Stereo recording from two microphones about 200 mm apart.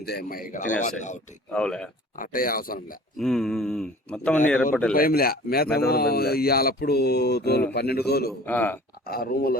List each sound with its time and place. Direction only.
0.0 s speech: 50° left (ahead or behind); by 1.2 s 35° left (ahead or behind)
1.5 s speech: 5° left (ahead or behind)
2.1 s speech: 45° left (ahead or behind)
3.2 s speech: centre (ahead or behind)
4.9 s speech: 50° left (ahead or behind)
8.4 s speech: 10° left (ahead or behind)
9.0 s speech: 50° left (ahead or behind)